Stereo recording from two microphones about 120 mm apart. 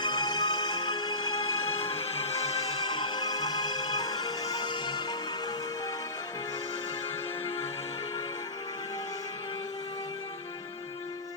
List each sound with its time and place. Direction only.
0.0 s music: 35° left (ahead or behind)
2.0 s music: 60° left (ahead or behind)
2.8 s music: 40° left (ahead or behind)